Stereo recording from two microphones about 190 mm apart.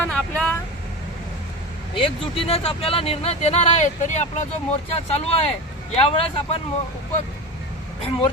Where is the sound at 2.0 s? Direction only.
30° left (ahead or behind).